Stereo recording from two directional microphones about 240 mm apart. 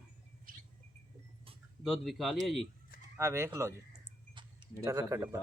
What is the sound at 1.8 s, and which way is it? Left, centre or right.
Speech, centre.